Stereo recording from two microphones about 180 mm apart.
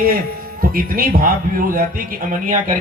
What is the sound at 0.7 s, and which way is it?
Speech, 55° right (ahead or behind).